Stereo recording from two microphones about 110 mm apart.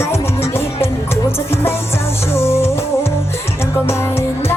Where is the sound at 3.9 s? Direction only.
25° left (ahead or behind).